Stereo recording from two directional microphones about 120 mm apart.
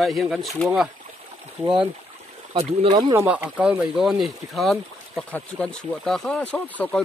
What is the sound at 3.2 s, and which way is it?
Speech, 10° right (ahead or behind).